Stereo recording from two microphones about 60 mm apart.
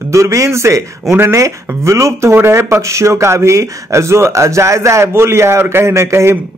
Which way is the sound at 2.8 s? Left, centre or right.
Right.